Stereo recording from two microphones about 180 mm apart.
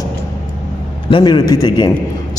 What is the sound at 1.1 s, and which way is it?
Speech, 20° left (ahead or behind).